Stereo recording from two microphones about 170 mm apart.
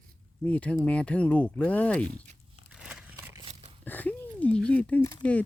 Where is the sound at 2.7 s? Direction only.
5° right (ahead or behind).